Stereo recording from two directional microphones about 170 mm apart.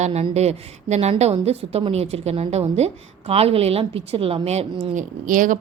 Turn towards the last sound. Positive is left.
turn(degrees=-50)  # may be behind; listen again after turning